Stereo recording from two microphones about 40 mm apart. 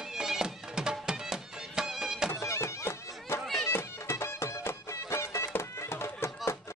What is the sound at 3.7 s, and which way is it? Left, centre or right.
Music, left.